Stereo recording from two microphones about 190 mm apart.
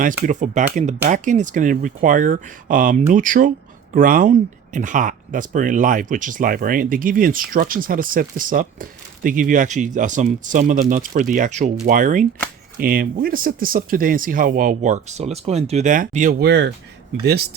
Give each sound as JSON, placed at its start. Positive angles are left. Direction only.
{"t": 0.3, "sound": "speech", "side_deg": -40}
{"t": 17.2, "sound": "speech", "side_deg": -55}